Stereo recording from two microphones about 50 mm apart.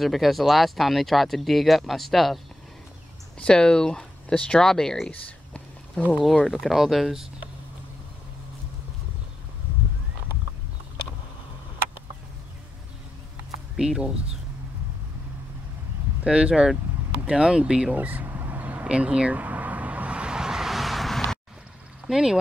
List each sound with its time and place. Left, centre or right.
0.0 s speech: centre
3.3 s speech: centre
5.1 s a sound: left
6.6 s speech: centre
13.7 s speech: centre
16.3 s speech: centre
17.9 s vehicle: right
18.9 s a sound: right; by 21.4 s centre
22.0 s speech: centre